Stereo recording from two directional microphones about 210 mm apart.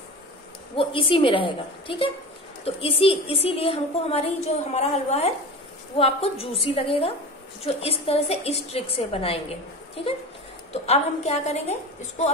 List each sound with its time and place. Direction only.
0.7 s a woman's voice: 25° left (ahead or behind)
10.7 s a woman's voice: 30° left (ahead or behind)